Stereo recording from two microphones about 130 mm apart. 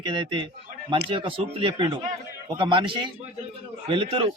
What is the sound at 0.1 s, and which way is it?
A man's voice, 40° right (ahead or behind).